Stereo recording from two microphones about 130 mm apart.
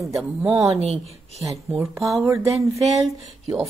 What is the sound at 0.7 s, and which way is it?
Speech, 55° right (ahead or behind).